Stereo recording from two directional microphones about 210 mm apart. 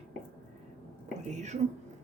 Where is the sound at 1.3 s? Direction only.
35° right (ahead or behind).